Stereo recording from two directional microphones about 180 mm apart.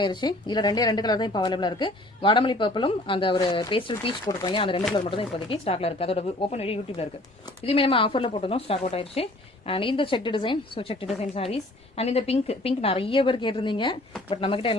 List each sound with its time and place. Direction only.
0.0 s a woman's voice: 25° left (ahead or behind)